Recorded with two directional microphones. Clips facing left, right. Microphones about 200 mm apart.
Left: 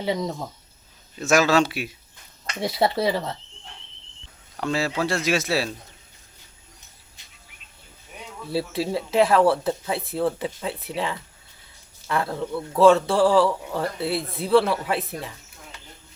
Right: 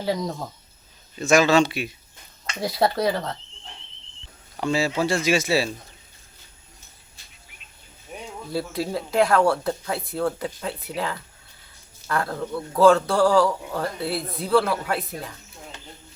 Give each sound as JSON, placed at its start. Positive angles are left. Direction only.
{"t": 0.0, "sound": "speech", "side_deg": 0}
{"t": 4.5, "sound": "speech", "side_deg": 0}
{"t": 7.2, "sound": "bird", "side_deg": 20}
{"t": 8.4, "sound": "speech", "side_deg": 30}
{"t": 9.0, "sound": "speech", "side_deg": 5}